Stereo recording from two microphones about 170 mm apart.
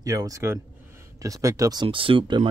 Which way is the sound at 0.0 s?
20° right (ahead or behind).